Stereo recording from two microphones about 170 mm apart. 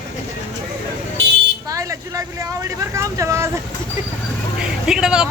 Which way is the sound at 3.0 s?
15° right (ahead or behind).